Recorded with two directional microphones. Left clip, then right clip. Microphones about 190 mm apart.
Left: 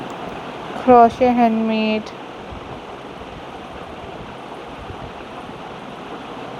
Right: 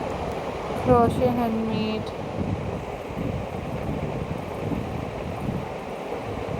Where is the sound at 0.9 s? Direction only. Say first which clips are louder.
Left 10 dB; 45° left (ahead or behind).